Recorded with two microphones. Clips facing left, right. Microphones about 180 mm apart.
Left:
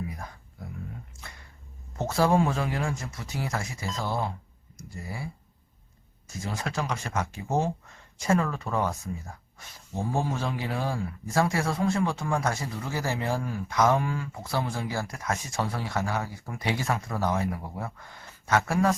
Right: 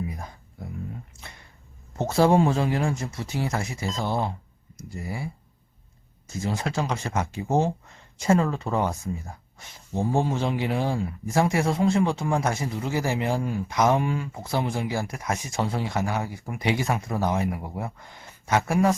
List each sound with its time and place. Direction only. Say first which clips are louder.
2.0 s speech: right 4 dB; 25° right (ahead or behind)